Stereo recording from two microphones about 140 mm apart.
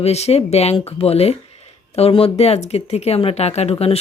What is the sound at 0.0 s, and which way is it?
A woman's voice, 50° left (ahead or behind).